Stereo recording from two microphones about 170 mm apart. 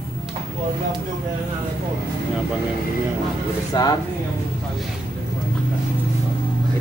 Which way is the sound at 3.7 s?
25° left (ahead or behind).